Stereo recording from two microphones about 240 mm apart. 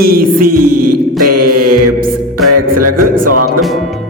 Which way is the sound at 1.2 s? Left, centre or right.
Right.